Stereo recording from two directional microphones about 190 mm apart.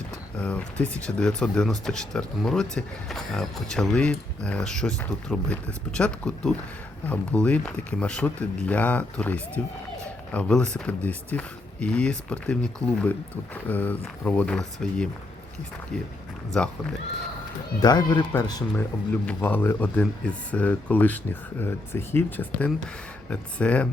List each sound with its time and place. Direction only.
0.3 s speech: 5° left (ahead or behind)
16.5 s speech: 5° left (ahead or behind)
17.7 s speech: 20° left (ahead or behind)
19.2 s speech: 10° left (ahead or behind)